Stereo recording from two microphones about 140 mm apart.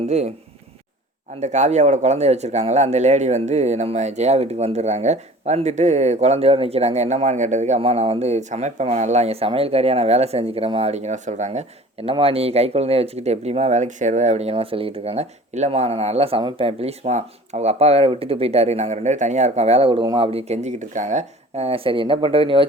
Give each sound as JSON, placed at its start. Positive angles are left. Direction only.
{"t": 0.0, "sound": "speech", "side_deg": -50}
{"t": 1.4, "sound": "speech", "side_deg": -55}
{"t": 20.0, "sound": "speech", "side_deg": -35}